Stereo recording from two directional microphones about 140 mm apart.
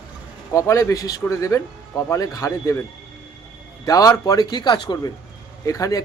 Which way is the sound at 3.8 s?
25° left (ahead or behind).